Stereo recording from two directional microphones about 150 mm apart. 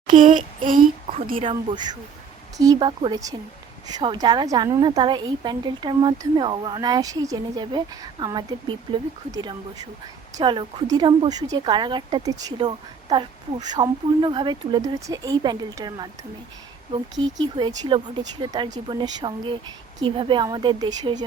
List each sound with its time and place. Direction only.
0.1 s child singing: 60° right (ahead or behind)
1.4 s a woman's voice: 35° right (ahead or behind)